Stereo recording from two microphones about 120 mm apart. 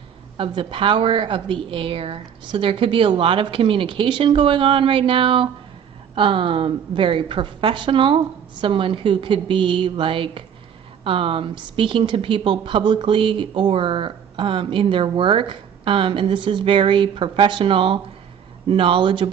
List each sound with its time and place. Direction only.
0.4 s a woman's voice: 45° right (ahead or behind)